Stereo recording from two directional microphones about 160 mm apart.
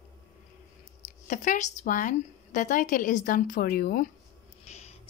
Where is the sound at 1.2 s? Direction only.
50° left (ahead or behind).